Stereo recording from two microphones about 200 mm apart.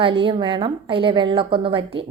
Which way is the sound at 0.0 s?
25° right (ahead or behind).